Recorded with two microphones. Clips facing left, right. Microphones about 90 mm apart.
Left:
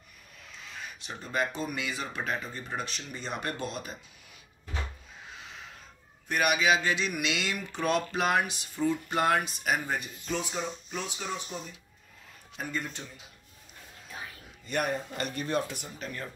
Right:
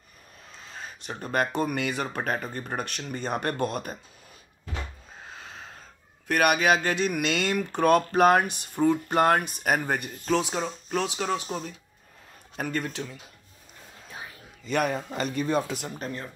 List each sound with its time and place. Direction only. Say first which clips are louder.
0.5 s a sound: right 2 dB; 35° right (ahead or behind)
1.2 s speech: right 5 dB; 55° right (ahead or behind)
5.2 s crow: right 3 dB; 40° right (ahead or behind)
6.2 s speech: right 4 dB; 65° right (ahead or behind)
10.3 s speech: right 7 dB; 85° right
12.5 s a man's voice: right 5 dB; 60° right (ahead or behind)
14.7 s a man's voice: right 4 dB; 90° right
16.0 s speech: right 3 dB; 40° right (ahead or behind)